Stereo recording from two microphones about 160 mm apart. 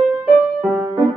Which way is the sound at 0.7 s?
15° right (ahead or behind).